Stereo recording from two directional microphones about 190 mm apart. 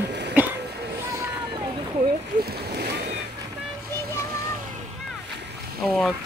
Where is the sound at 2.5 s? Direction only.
60° right (ahead or behind).